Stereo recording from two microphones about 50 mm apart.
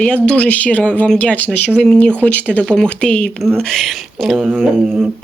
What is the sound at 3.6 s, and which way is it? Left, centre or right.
Speech, centre.